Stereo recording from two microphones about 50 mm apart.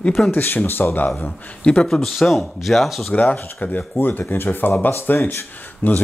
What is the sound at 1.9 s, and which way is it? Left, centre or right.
Speech, centre.